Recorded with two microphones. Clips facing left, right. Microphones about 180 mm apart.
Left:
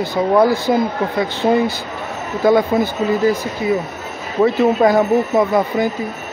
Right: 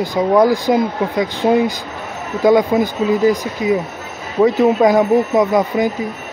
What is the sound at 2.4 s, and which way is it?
Speech, 15° right (ahead or behind).